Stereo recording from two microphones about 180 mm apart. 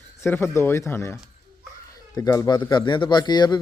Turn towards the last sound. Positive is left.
turn(degrees=25)  # may be behind; listen again after turning